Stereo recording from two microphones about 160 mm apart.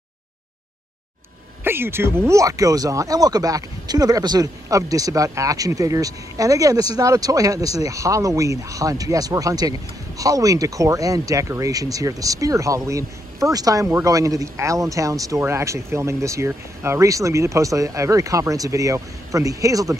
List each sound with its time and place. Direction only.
1.6 s speech: 15° right (ahead or behind)